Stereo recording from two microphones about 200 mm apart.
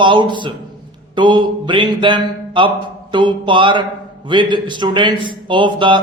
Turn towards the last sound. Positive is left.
turn(degrees=-25)  # may be behind; listen again after turning